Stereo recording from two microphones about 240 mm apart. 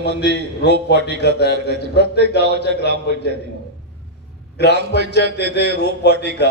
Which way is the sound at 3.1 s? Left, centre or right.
Left.